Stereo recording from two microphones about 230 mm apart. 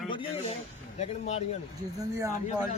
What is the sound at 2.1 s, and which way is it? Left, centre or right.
Speech, centre.